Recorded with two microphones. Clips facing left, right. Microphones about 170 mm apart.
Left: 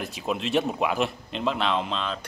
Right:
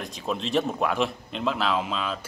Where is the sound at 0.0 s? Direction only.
5° left (ahead or behind).